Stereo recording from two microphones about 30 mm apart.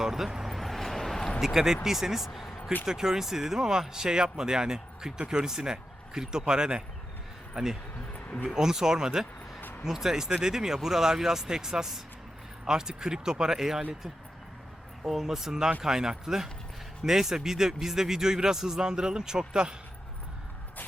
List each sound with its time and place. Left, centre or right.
0.0 s speech: centre
0.4 s vehicle: centre
1.5 s a man's voice: centre; by 6.8 s right
7.5 s speech: centre
8.1 s a sound: left
8.4 s a man's voice: centre
9.6 s vehicle: left
9.8 s a man's voice: centre
15.1 s a man's voice: centre; by 19.7 s right